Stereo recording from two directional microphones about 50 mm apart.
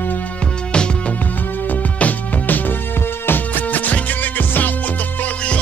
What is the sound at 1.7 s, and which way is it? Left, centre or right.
Music, left.